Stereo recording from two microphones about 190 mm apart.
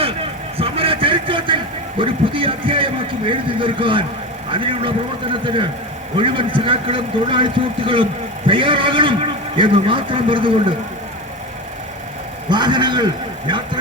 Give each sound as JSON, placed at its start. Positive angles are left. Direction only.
{"t": 0.5, "sound": "a sound", "side_deg": -30}
{"t": 2.0, "sound": "vehicle", "side_deg": -30}
{"t": 4.5, "sound": "a man's voice", "side_deg": -25}
{"t": 12.5, "sound": "a man's voice", "side_deg": -25}